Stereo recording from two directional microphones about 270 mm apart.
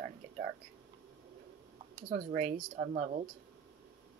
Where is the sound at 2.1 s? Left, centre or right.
Right.